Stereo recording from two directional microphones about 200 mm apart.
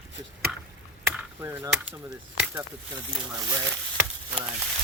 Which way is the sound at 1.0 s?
10° right (ahead or behind).